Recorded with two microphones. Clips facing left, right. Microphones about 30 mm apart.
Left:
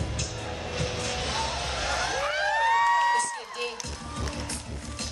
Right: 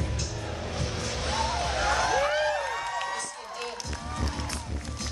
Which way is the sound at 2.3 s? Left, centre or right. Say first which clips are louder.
Left 4 dB; left.